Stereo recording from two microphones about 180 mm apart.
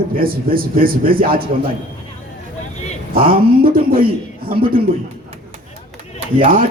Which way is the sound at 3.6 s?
55° right (ahead or behind).